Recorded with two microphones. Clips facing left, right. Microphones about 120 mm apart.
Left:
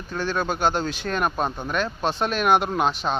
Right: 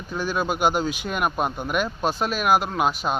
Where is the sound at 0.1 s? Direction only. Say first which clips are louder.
Even; 10° right (ahead or behind).